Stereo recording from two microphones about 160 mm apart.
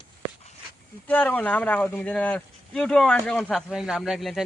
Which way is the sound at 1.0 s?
10° left (ahead or behind).